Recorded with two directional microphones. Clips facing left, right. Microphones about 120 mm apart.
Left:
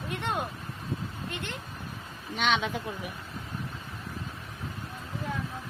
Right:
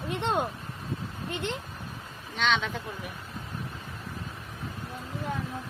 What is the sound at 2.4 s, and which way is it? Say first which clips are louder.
Speech: even; 10° left (ahead or behind).